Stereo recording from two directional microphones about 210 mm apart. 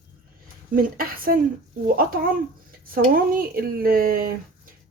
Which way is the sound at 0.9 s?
45° right (ahead or behind).